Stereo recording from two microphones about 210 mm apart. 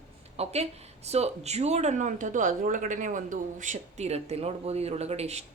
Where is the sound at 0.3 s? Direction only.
30° right (ahead or behind).